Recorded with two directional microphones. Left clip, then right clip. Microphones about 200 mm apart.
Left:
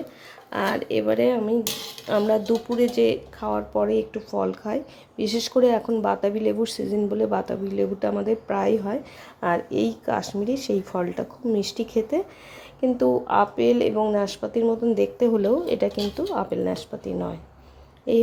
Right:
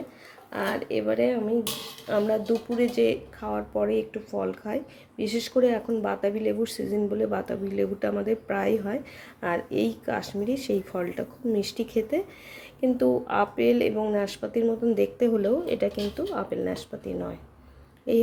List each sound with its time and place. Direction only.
0.5 s speech: 15° left (ahead or behind)